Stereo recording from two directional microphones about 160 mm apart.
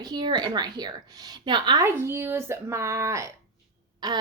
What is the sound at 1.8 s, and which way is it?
A woman's voice, 15° right (ahead or behind).